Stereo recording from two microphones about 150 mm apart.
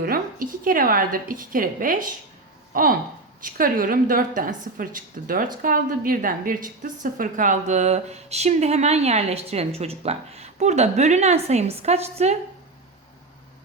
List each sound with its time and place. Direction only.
0.0 s a woman's voice: 70° right (ahead or behind); by 12.4 s 45° right (ahead or behind)